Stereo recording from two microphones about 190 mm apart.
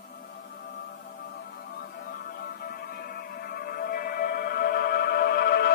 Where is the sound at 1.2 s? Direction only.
55° left (ahead or behind).